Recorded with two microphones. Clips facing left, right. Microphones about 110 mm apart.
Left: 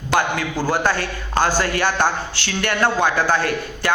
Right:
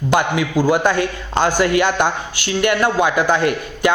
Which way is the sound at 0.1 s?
15° right (ahead or behind).